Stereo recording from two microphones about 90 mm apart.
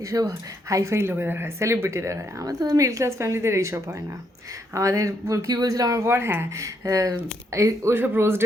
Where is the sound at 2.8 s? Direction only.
35° right (ahead or behind).